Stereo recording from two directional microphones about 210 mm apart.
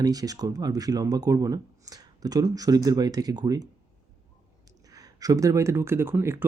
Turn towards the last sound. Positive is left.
turn(degrees=-10)  # may be behind; listen again after turning